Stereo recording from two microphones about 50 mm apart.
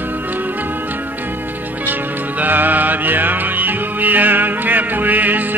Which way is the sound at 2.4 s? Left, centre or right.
Right.